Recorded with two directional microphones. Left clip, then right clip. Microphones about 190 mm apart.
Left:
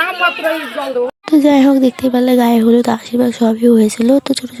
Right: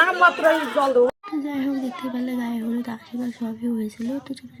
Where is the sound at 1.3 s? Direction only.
55° left (ahead or behind).